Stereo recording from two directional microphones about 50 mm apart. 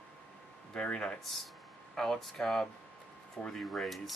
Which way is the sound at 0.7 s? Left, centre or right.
Centre.